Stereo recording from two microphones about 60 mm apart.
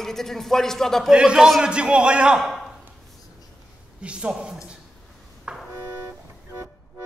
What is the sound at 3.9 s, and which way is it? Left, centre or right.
Speech, centre.